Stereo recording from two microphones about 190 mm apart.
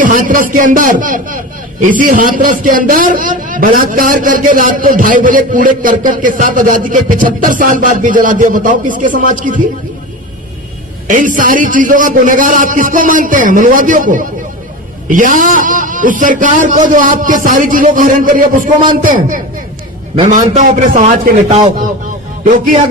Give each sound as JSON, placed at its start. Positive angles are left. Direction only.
{"t": 0.0, "sound": "a man's voice", "side_deg": -45}
{"t": 11.1, "sound": "a man's voice", "side_deg": -45}